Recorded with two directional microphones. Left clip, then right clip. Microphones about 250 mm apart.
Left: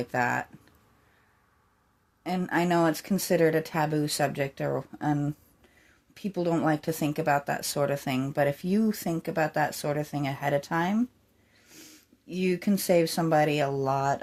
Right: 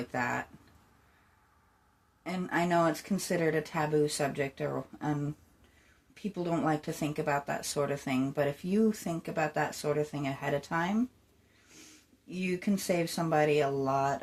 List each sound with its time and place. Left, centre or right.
0.1 s speech: left
2.2 s speech: left
12.3 s speech: left